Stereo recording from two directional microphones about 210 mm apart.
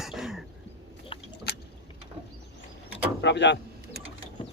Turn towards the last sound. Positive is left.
turn(degrees=55)  # may be behind; listen again after turning